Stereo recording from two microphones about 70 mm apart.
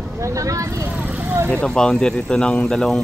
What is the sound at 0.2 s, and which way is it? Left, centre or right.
Speech, right.